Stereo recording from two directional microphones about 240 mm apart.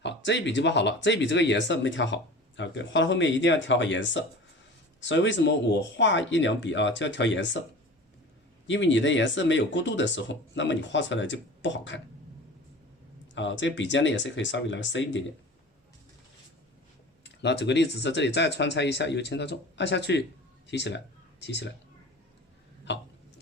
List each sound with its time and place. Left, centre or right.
0.0 s speech: left
8.6 s speech: left
13.3 s speech: left
17.2 s speech: left
22.9 s speech: left